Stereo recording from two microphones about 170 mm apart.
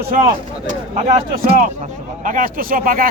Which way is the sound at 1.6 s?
50° right (ahead or behind).